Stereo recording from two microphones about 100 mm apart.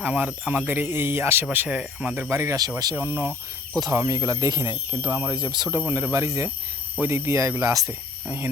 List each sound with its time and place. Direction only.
0.0 s speech: 15° right (ahead or behind)
2.3 s speech: 30° right (ahead or behind)
2.9 s speech: 25° right (ahead or behind)
5.3 s speech: 50° right (ahead or behind)
5.6 s speech: 30° right (ahead or behind)